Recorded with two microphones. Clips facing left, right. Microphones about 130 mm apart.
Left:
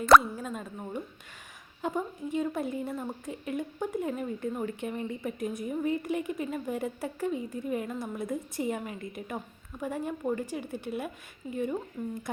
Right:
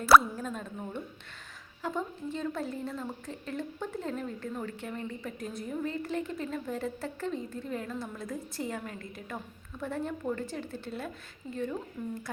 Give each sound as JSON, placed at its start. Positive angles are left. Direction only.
{"t": 0.0, "sound": "speech", "side_deg": -5}
{"t": 0.3, "sound": "a woman's voice", "side_deg": 5}